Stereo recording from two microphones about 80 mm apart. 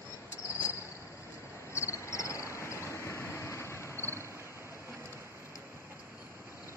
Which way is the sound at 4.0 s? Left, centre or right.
Right.